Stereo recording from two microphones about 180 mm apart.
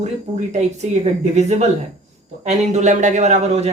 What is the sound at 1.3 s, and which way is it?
Speech, 40° right (ahead or behind).